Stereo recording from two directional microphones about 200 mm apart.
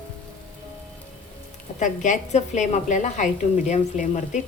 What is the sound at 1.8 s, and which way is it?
A woman's voice, 40° left (ahead or behind).